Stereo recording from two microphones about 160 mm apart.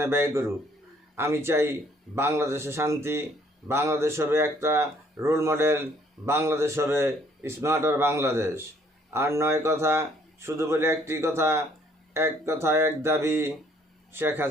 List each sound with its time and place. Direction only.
0.0 s speech: 15° right (ahead or behind)